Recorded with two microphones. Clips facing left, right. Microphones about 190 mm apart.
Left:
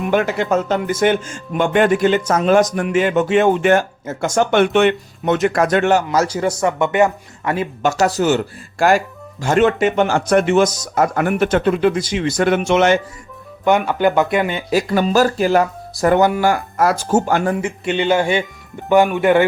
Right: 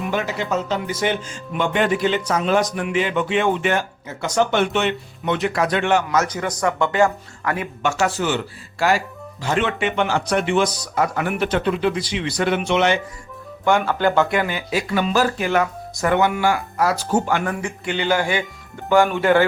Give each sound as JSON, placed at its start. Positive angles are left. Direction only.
{"t": 0.1, "sound": "speech", "side_deg": 55}
{"t": 13.7, "sound": "speech", "side_deg": 20}
{"t": 14.7, "sound": "speech", "side_deg": 40}
{"t": 17.5, "sound": "speech", "side_deg": 25}